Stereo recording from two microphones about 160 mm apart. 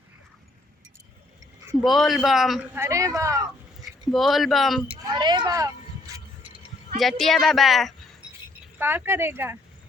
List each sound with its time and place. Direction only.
1.8 s speech: centre (ahead or behind)
2.7 s speech: 15° right (ahead or behind)
4.1 s speech: centre (ahead or behind)
4.9 s speech: 30° right (ahead or behind)
6.1 s a sound: 20° right (ahead or behind)
7.0 s speech: centre (ahead or behind)
8.8 s speech: 15° right (ahead or behind)